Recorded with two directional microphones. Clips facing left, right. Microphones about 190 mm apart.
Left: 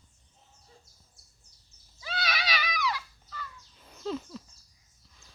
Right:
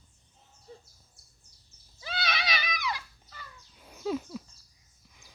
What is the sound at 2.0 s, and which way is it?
Goat, 25° right (ahead or behind).